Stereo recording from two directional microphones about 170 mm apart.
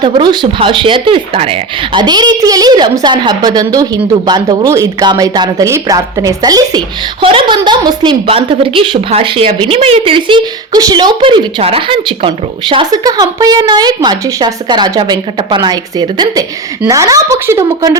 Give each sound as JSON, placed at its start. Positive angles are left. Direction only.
{"t": 0.0, "sound": "speech", "side_deg": -25}